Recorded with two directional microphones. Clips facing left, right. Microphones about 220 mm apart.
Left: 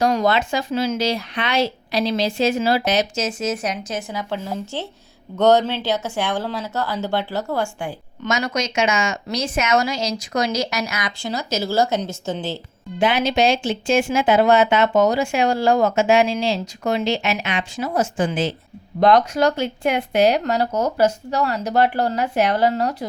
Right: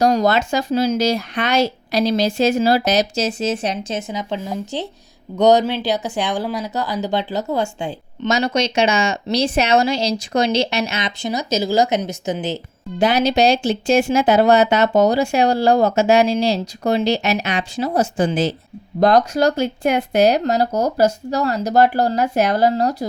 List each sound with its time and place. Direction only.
0.0 s a woman's voice: 40° right (ahead or behind); by 12.5 s 20° right (ahead or behind)
13.0 s speech: 40° right (ahead or behind)